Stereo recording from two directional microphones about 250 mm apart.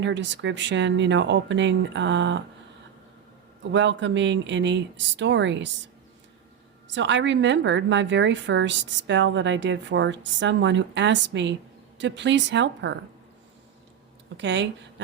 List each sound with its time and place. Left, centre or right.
0.0 s a woman's voice: right
3.6 s a woman's voice: right
6.8 s a woman's voice: right
14.3 s a woman's voice: right